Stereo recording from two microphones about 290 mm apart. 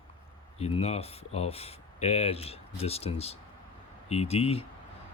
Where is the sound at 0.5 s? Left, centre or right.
Left.